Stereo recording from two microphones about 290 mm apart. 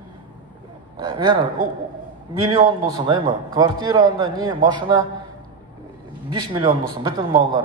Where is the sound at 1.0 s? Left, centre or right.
Centre.